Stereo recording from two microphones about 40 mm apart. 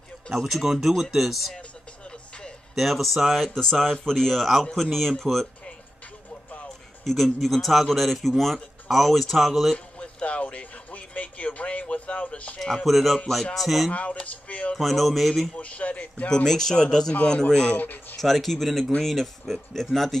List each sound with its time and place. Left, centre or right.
0.3 s speech: centre
2.7 s speech: centre
7.3 s speech: centre
9.9 s music: left
11.9 s a man's voice: left
12.5 s speech: centre
14.2 s a man's voice: left
14.8 s speech: centre
15.5 s a man's voice: left
16.4 s a man's voice: centre
17.7 s speech: left
18.2 s speech: centre